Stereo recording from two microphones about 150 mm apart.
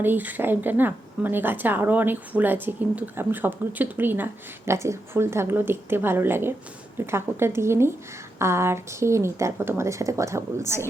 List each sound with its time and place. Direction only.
0.0 s a woman's voice: 10° right (ahead or behind)